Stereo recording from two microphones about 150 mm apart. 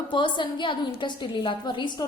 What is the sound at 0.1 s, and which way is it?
A woman's voice, 30° left (ahead or behind).